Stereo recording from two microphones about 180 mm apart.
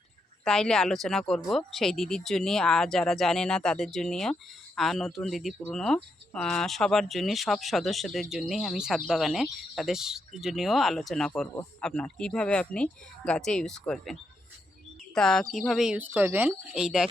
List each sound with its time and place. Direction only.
0.4 s speech: 5° left (ahead or behind)